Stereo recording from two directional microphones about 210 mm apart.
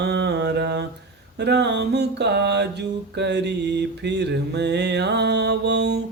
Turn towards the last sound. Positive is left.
turn(degrees=-50)  # may be behind; listen again after turning